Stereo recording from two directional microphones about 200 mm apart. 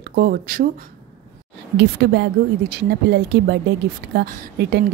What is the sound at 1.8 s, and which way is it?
A woman's voice, 60° right (ahead or behind).